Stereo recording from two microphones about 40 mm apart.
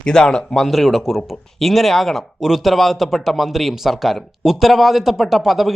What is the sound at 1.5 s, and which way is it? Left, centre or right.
Speech, centre.